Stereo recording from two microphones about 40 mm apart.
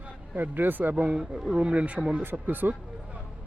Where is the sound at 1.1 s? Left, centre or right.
Centre.